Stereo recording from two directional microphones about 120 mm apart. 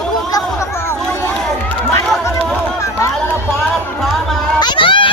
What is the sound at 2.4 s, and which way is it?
Run, 10° left (ahead or behind).